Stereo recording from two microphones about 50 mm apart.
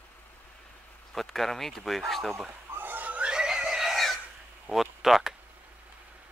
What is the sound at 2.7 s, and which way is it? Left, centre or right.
Pig, right.